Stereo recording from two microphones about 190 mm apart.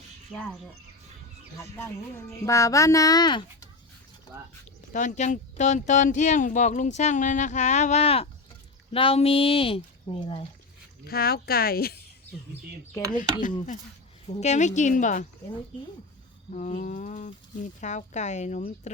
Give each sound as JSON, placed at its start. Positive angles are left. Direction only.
{"t": 0.3, "sound": "speech", "side_deg": -5}
{"t": 1.8, "sound": "speech", "side_deg": 15}
{"t": 4.9, "sound": "speech", "side_deg": 40}
{"t": 11.0, "sound": "speech", "side_deg": 55}
{"t": 13.4, "sound": "speech", "side_deg": 40}
{"t": 16.5, "sound": "speech", "side_deg": 40}